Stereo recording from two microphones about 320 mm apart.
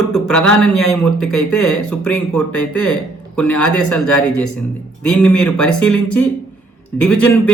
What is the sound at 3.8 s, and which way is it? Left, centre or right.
Speech, left.